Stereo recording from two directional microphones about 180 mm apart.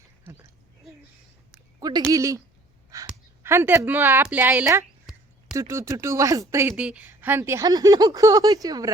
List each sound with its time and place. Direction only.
1.8 s speech: 20° right (ahead or behind)